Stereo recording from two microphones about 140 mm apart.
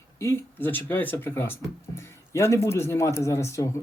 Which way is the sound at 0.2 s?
20° left (ahead or behind).